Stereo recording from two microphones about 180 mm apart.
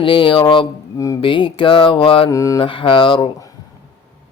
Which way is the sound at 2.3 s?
20° left (ahead or behind).